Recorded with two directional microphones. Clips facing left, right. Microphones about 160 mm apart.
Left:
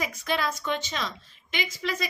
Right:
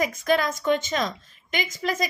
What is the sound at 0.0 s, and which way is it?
A woman's voice, 45° right (ahead or behind).